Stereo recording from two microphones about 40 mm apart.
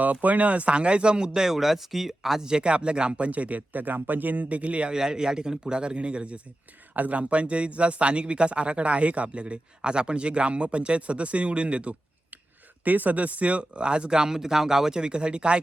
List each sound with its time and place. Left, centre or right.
0.0 s speech: right; by 2.4 s centre
2.4 s speech: centre
4.9 s speech: centre
6.9 s speech: right
12.8 s speech: right